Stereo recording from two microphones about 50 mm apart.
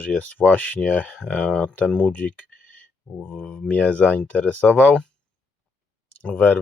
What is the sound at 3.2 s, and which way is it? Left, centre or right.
Speech, left.